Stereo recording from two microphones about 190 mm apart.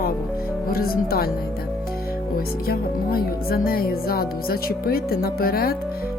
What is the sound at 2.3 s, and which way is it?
Speech, 50° left (ahead or behind).